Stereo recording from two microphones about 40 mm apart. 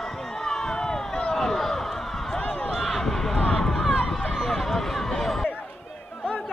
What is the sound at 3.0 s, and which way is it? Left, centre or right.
Run, centre.